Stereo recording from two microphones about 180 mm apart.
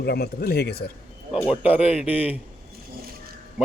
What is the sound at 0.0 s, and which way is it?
Speech, 60° left (ahead or behind).